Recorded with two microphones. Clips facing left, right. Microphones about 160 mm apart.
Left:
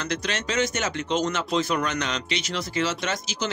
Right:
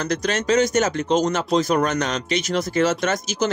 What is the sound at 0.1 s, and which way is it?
Speech, 40° right (ahead or behind).